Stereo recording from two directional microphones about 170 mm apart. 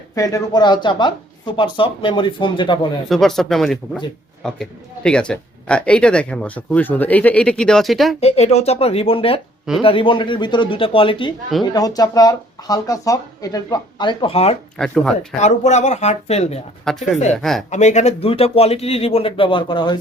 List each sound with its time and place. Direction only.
0.2 s speech: 20° left (ahead or behind)
3.1 s speech: centre (ahead or behind)
8.2 s speech: 40° left (ahead or behind)
14.8 s speech: 5° left (ahead or behind)
15.4 s speech: 40° left (ahead or behind)
16.9 s speech: 5° left (ahead or behind)
17.7 s speech: 45° left (ahead or behind); by 20.0 s 25° left (ahead or behind)